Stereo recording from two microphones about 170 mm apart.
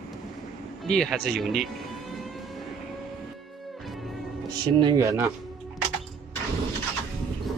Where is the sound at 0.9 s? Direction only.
5° left (ahead or behind).